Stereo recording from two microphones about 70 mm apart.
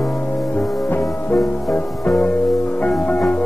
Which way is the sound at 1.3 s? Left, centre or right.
Left.